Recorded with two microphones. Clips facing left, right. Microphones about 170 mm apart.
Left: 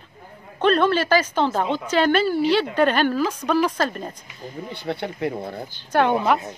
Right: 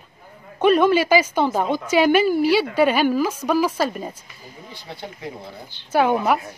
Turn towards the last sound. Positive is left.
turn(degrees=-5)  # may be behind; listen again after turning